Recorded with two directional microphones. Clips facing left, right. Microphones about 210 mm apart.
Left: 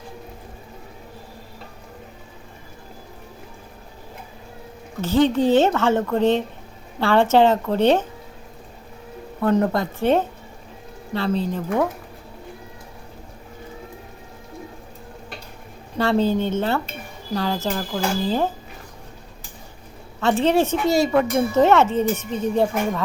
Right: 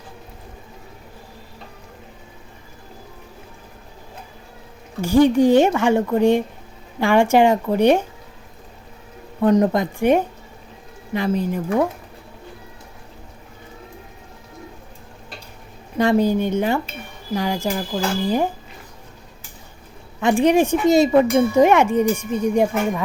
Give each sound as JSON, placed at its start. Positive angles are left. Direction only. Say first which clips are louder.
{"t": 4.9, "sound": "speech", "louder": "right 4 dB", "side_deg": -10}
{"t": 9.4, "sound": "speech", "louder": "right 3 dB", "side_deg": -15}
{"t": 16.0, "sound": "speech", "louder": "right 2 dB", "side_deg": -15}
{"t": 20.2, "sound": "speech", "louder": "right 3 dB", "side_deg": -15}